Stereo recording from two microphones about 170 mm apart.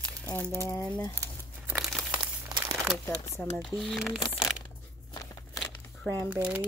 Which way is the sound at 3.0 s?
15° left (ahead or behind).